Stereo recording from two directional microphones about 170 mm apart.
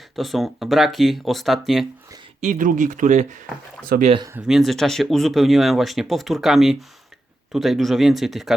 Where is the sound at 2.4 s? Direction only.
50° right (ahead or behind).